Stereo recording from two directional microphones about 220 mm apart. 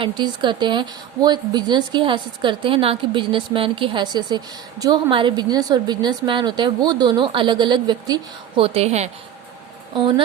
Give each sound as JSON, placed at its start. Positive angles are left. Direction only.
{"t": 0.0, "sound": "speech", "side_deg": -20}